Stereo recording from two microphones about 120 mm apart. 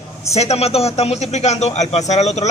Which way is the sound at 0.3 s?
65° left (ahead or behind).